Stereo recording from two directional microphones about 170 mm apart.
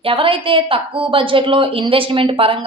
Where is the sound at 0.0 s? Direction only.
30° right (ahead or behind).